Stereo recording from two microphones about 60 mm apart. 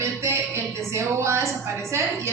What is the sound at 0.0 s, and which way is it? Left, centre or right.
A woman's voice, right.